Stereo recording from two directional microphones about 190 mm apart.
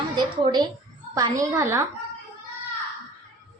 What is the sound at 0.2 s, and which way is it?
A woman's voice, 20° right (ahead or behind).